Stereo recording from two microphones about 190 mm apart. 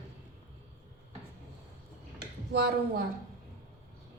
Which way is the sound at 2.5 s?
60° right (ahead or behind).